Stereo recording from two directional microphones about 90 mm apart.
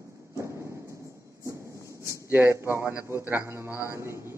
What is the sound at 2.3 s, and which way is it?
A man's voice, 25° right (ahead or behind).